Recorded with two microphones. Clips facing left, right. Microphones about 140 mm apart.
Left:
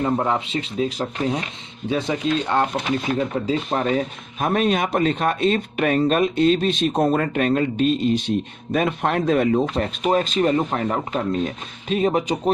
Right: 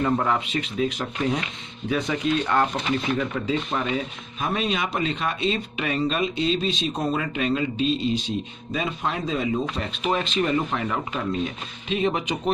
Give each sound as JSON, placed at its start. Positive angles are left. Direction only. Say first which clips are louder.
{"t": 0.0, "sound": "speech", "louder": "left 2 dB", "side_deg": 25}